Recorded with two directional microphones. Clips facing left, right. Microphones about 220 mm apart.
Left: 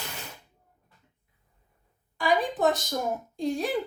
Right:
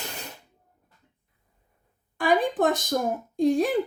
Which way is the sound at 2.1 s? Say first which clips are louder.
Right 3 dB; 55° right (ahead or behind).